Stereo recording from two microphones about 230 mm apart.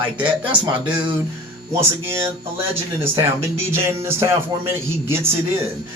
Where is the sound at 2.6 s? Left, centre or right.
Centre.